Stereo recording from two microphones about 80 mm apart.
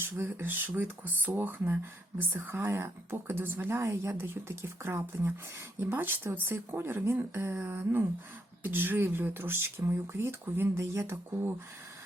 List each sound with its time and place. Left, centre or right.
0.0 s speech: right